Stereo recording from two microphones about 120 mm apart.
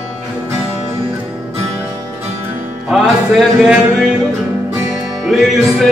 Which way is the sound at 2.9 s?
Centre (ahead or behind).